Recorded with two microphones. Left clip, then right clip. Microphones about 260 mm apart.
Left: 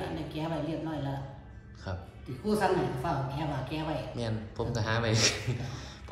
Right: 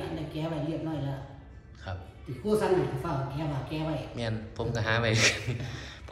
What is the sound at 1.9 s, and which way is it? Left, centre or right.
Speech, left.